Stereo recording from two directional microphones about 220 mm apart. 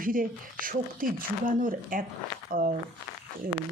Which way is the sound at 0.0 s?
40° right (ahead or behind).